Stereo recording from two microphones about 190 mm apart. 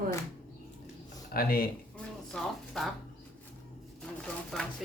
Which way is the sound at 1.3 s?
50° left (ahead or behind).